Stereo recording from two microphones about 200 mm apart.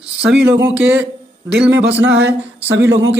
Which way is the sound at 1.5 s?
60° right (ahead or behind).